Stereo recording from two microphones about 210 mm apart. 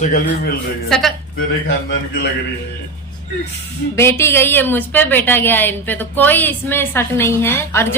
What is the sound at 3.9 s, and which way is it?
A woman's voice, 10° left (ahead or behind).